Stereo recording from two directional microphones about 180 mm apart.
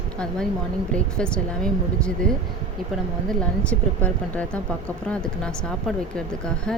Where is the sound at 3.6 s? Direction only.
5° left (ahead or behind).